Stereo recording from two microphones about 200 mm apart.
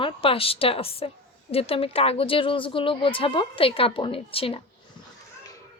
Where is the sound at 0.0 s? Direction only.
25° left (ahead or behind).